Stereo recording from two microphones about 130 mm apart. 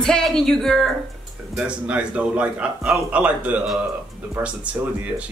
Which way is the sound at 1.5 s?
10° right (ahead or behind).